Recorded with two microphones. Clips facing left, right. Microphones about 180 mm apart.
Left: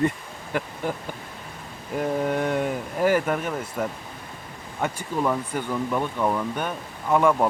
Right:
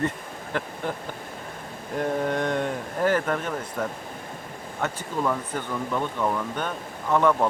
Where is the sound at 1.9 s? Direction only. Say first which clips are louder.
Left 1 dB; 5° left (ahead or behind).